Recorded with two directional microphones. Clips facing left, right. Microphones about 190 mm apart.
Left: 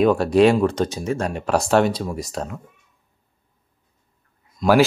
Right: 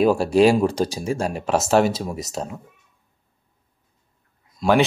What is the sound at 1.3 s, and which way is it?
Speech, 5° right (ahead or behind).